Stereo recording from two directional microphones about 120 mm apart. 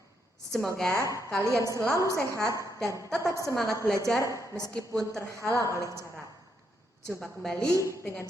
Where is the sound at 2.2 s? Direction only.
25° right (ahead or behind).